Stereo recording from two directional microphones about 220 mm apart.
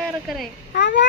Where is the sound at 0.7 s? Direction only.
45° left (ahead or behind).